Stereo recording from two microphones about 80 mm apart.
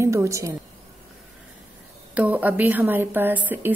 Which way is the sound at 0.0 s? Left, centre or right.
Right.